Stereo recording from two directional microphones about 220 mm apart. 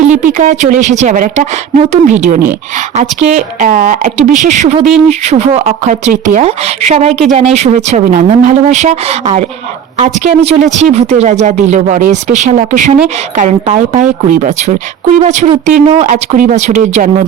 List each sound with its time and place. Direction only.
0.1 s speech: 35° right (ahead or behind)